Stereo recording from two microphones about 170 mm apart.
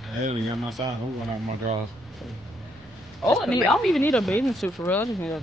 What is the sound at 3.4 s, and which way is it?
Speech, centre (ahead or behind).